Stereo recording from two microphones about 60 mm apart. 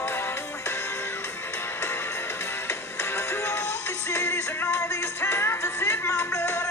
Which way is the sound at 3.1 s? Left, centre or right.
Left.